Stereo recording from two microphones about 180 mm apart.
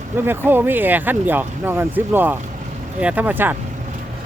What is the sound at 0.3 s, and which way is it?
Speech, 10° right (ahead or behind).